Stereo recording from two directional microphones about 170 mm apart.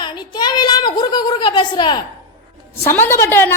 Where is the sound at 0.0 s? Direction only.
25° left (ahead or behind).